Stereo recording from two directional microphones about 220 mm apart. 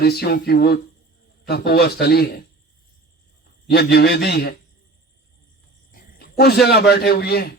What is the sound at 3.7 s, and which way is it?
Speech, 45° left (ahead or behind).